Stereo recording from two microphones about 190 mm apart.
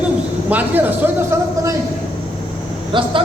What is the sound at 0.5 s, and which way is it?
A man's voice, 10° right (ahead or behind).